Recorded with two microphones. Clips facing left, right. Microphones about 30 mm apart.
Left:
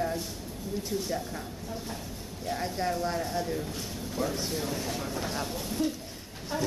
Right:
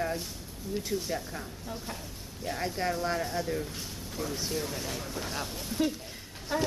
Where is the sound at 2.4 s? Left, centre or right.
Centre.